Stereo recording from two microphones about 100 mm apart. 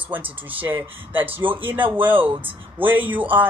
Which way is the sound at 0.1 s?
20° right (ahead or behind).